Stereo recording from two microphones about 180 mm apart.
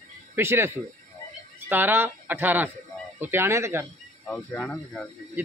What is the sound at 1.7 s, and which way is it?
A man's voice, 10° right (ahead or behind).